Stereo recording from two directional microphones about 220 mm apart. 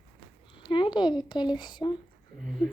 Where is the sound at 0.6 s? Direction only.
20° left (ahead or behind).